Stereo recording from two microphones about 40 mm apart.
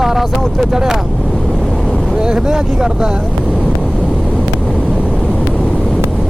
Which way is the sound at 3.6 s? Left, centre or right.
Centre.